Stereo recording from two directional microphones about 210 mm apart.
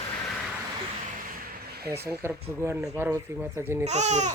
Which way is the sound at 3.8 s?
35° right (ahead or behind).